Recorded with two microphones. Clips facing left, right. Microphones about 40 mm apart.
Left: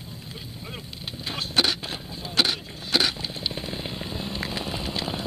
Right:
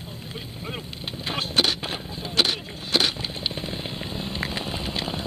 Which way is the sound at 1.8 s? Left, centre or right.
Centre.